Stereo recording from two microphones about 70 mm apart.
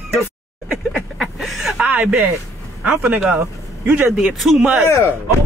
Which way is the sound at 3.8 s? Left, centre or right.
Centre.